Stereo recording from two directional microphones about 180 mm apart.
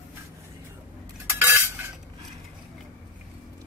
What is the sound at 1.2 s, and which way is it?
Cutlery, 15° right (ahead or behind).